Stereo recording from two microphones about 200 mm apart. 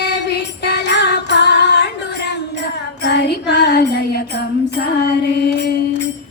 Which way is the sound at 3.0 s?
55° left (ahead or behind).